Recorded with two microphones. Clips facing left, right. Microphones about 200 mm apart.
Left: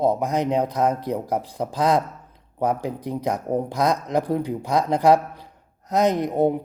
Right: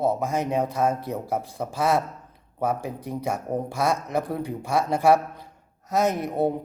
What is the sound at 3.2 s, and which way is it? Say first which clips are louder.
Speech: left 3 dB; 15° left (ahead or behind).